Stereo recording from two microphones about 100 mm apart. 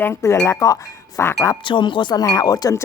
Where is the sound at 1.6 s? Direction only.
55° left (ahead or behind).